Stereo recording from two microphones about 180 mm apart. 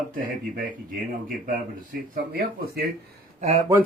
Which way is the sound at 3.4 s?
35° right (ahead or behind).